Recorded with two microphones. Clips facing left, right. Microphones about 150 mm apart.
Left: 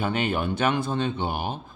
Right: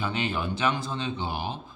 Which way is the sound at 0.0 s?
55° left (ahead or behind).